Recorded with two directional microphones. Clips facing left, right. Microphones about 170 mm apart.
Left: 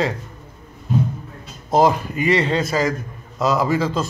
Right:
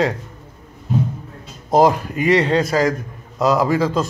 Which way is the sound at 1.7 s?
15° right (ahead or behind).